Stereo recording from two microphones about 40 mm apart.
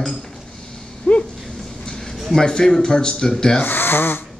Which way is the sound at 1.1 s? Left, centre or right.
Left.